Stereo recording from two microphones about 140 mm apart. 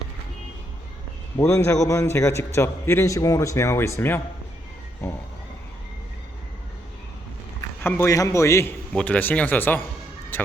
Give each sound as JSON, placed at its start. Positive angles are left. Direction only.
{"t": 1.4, "sound": "a man's voice", "side_deg": 20}
{"t": 7.8, "sound": "a man's voice", "side_deg": 15}
{"t": 9.0, "sound": "speech", "side_deg": 10}